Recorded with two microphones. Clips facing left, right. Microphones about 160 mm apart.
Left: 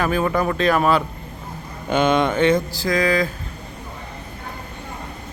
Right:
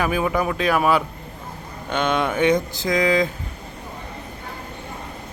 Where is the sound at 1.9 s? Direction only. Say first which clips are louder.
Left 4 dB; 5° left (ahead or behind); by 3.2 s 20° right (ahead or behind).